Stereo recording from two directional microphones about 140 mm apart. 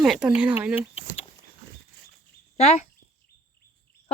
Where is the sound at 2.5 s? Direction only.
55° left (ahead or behind).